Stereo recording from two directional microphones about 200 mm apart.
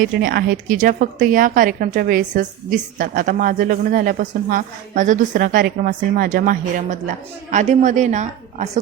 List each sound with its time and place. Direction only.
0.0 s a woman's voice: 45° right (ahead or behind)